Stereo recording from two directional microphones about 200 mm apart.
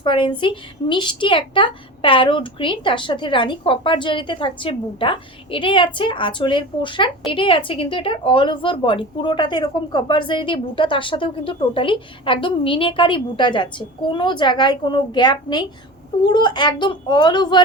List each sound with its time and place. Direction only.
0.0 s a woman's voice: 25° left (ahead or behind)